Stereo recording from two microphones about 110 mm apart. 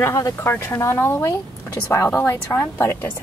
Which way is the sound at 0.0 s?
25° left (ahead or behind).